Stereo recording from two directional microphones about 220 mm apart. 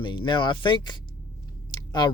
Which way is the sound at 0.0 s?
20° left (ahead or behind).